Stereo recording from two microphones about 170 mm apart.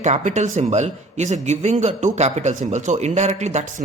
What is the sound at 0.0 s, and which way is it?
Speech, 45° right (ahead or behind).